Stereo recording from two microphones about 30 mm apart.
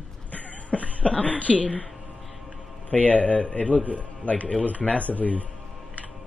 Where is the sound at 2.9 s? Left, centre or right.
Left.